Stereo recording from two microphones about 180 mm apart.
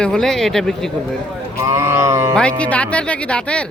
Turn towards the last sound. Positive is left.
turn(degrees=5)  # may be behind; listen again after turning